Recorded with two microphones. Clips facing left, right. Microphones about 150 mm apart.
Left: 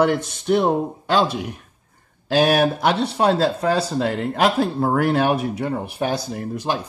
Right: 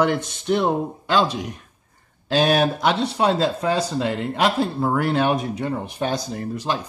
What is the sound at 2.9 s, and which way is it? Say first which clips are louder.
Speech: left 2 dB; 60° left (ahead or behind).